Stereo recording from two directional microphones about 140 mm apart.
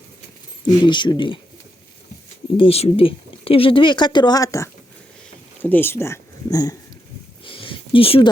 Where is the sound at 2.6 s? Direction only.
45° left (ahead or behind); by 6.7 s 25° left (ahead or behind).